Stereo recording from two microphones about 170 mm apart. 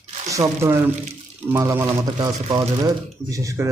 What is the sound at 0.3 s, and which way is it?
Speech, 20° right (ahead or behind).